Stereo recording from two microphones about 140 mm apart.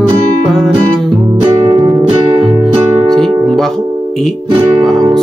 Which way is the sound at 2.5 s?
10° right (ahead or behind).